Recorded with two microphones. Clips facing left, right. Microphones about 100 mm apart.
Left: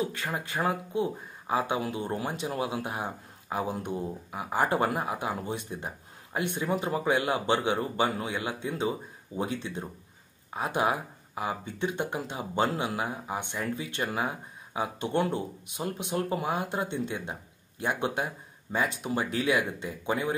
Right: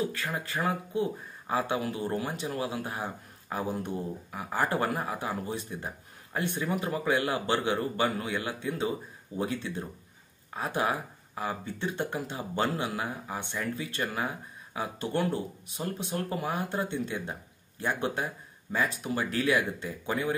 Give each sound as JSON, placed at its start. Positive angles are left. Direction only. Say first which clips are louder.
{"t": 0.0, "sound": "speech", "louder": "even", "side_deg": 20}